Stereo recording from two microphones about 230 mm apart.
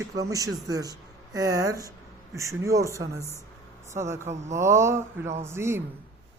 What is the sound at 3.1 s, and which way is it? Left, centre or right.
Speech, centre.